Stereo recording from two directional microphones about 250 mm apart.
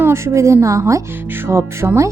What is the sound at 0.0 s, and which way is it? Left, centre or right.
A woman's voice, centre.